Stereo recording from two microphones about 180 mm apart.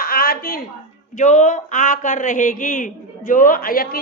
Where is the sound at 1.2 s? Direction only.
45° left (ahead or behind).